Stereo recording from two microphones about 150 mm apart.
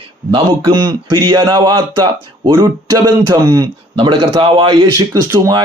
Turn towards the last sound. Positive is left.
turn(degrees=-20)  # may be behind; listen again after turning